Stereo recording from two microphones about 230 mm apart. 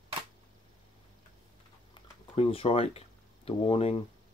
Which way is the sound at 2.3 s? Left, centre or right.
Left.